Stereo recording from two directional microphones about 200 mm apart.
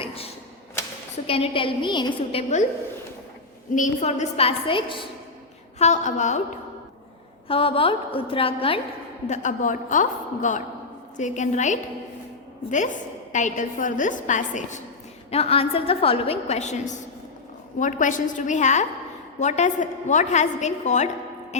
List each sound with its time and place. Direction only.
0.0 s typewriter: 30° left (ahead or behind)
1.3 s a woman's voice: 25° left (ahead or behind)
3.8 s a woman's voice: 35° left (ahead or behind)
5.8 s a woman's voice: 35° left (ahead or behind)
7.4 s a woman's voice: 25° left (ahead or behind)
9.3 s a woman's voice: 40° left (ahead or behind)
13.3 s a woman's voice: 40° left (ahead or behind)